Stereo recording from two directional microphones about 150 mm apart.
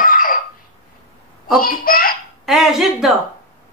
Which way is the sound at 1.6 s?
75° left (ahead or behind).